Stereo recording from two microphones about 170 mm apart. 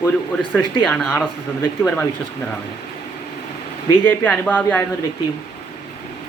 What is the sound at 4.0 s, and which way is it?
Speech, 10° left (ahead or behind).